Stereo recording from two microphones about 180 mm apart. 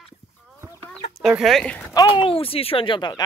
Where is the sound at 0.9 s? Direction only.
Centre (ahead or behind).